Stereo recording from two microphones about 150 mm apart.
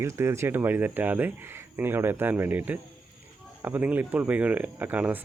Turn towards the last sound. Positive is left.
turn(degrees=-10)  # may be behind; listen again after turning